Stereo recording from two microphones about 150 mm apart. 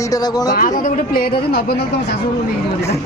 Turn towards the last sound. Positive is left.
turn(degrees=70)  # may be behind; listen again after turning